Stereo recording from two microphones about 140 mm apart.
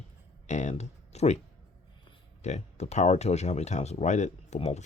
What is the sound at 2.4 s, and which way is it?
Speech, 55° left (ahead or behind).